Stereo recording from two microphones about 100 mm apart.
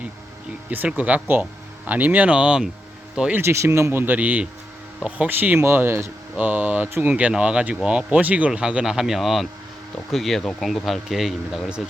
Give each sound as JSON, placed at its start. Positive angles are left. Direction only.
{"t": 0.7, "sound": "speech", "side_deg": -15}
{"t": 3.3, "sound": "speech", "side_deg": -25}